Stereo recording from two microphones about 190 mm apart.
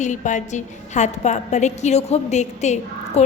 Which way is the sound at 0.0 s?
40° left (ahead or behind).